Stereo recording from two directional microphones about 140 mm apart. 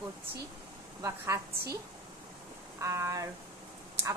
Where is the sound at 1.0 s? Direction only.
20° right (ahead or behind).